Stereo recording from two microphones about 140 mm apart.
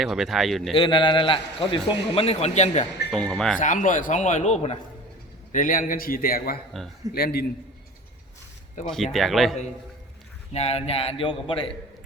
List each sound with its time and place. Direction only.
0.0 s speech: centre (ahead or behind)
0.7 s a man's voice: 35° left (ahead or behind); by 2.8 s 50° left (ahead or behind)
3.2 s speech: 5° left (ahead or behind)
3.6 s a man's voice: 65° left (ahead or behind)
5.5 s a man's voice: 75° left (ahead or behind)
8.8 s a man's voice: 60° left (ahead or behind)
9.1 s speech: centre (ahead or behind)
10.5 s a man's voice: 45° left (ahead or behind)